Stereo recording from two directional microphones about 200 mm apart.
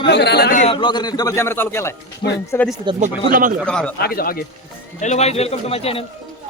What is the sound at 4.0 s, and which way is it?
Speech, 50° left (ahead or behind).